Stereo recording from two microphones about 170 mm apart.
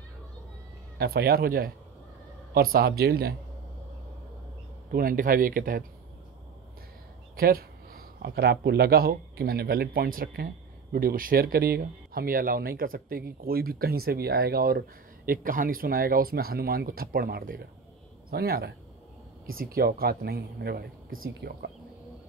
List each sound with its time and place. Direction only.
0.9 s speech: 70° right (ahead or behind)
4.9 s speech: 55° right (ahead or behind)
7.3 s speech: 60° right (ahead or behind)